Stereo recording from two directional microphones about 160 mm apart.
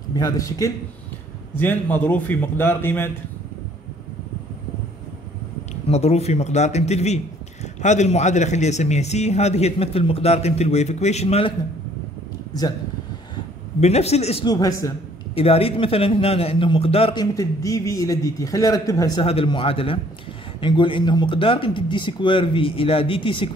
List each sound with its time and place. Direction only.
0.1 s a man's voice: 25° left (ahead or behind)
1.6 s a man's voice: 10° left (ahead or behind)
5.9 s speech: 40° left (ahead or behind)
13.7 s speech: 40° left (ahead or behind)
14.4 s a man's voice: 25° left (ahead or behind)
15.3 s speech: 40° left (ahead or behind)
17.2 s a man's voice: 20° left (ahead or behind)
19.2 s speech: 35° left (ahead or behind)